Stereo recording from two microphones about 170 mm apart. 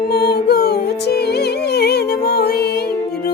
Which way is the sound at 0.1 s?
70° left (ahead or behind).